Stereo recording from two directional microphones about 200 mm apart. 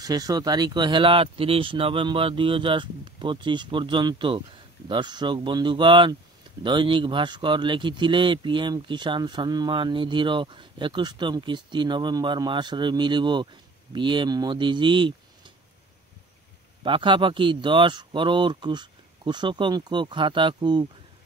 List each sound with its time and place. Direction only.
0.0 s speech: 20° right (ahead or behind)
16.8 s speech: 25° right (ahead or behind)